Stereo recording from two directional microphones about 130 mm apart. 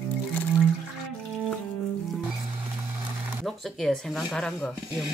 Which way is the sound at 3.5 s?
5° left (ahead or behind).